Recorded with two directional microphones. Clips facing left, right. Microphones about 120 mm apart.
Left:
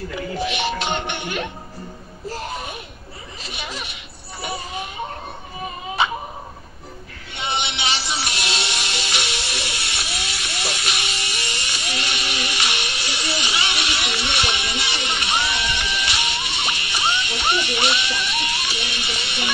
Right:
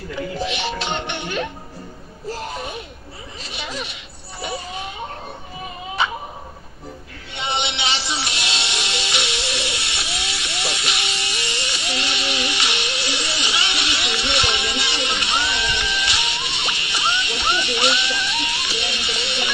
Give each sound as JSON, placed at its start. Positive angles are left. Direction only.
{"t": 0.5, "sound": "music", "side_deg": -30}
{"t": 7.3, "sound": "music", "side_deg": -25}